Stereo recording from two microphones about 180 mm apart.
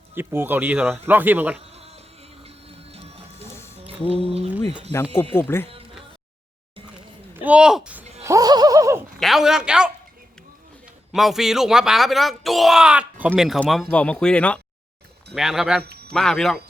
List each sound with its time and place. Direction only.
0.1 s speech: 10° right (ahead or behind)
2.4 s printer: 35° right (ahead or behind)
4.1 s speech: 35° right (ahead or behind)
5.3 s speech: 10° left (ahead or behind)
7.3 s speech: 5° right (ahead or behind)
8.2 s a sound: 20° right (ahead or behind)
9.2 s speech: centre (ahead or behind)
11.1 s speech: centre (ahead or behind)
15.8 s a sound: 60° right (ahead or behind)
16.1 s speech: 5° left (ahead or behind)